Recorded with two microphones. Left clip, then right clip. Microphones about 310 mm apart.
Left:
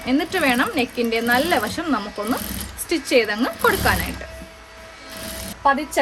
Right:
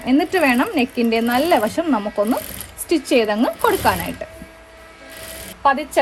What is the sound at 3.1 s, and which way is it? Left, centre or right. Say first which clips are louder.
Speech: even; centre.